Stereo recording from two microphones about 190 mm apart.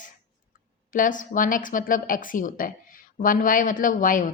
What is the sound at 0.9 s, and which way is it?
A woman's voice, 45° left (ahead or behind).